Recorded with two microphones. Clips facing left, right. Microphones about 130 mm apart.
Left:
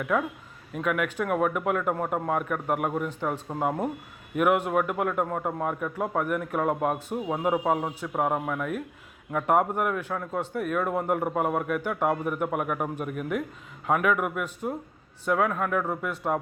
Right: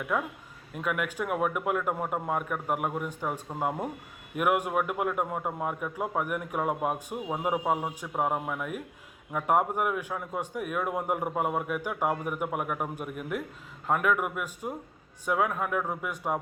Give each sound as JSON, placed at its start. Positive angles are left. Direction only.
{"t": 0.7, "sound": "a man's voice", "side_deg": 0}